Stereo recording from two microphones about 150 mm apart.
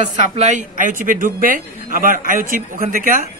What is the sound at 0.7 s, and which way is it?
A man's voice, 60° right (ahead or behind).